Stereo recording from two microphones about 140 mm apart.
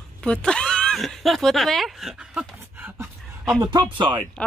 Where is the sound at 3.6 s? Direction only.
30° right (ahead or behind).